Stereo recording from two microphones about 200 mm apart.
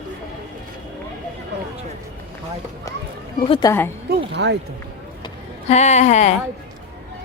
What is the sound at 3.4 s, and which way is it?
Speech, 20° left (ahead or behind).